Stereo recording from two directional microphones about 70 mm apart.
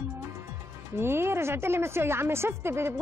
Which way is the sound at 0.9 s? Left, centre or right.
Right.